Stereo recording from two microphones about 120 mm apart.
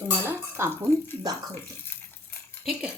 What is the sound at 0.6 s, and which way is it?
Speech, 20° right (ahead or behind).